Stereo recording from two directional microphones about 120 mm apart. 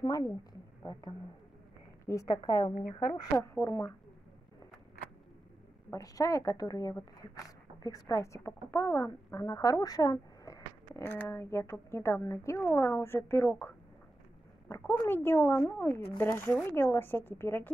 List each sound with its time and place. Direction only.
0.0 s a woman's voice: 30° left (ahead or behind)
3.3 s speech: 25° left (ahead or behind)
5.9 s speech: 30° left (ahead or behind)
15.0 s speech: 20° left (ahead or behind)